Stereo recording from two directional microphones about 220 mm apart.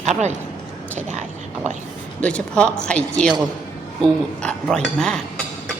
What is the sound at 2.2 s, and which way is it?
A woman's voice, 5° left (ahead or behind).